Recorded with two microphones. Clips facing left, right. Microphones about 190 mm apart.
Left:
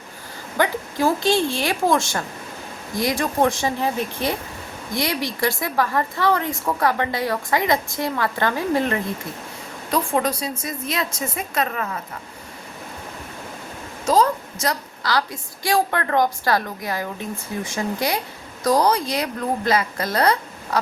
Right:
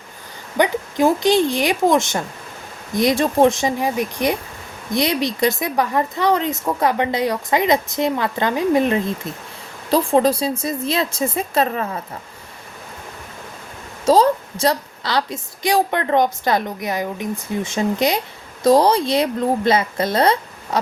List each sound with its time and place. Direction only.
0.5 s a woman's voice: 20° right (ahead or behind)
9.9 s a woman's voice: 30° right (ahead or behind)
14.0 s a woman's voice: 30° right (ahead or behind)